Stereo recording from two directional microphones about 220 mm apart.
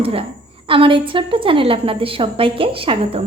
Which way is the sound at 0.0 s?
25° right (ahead or behind).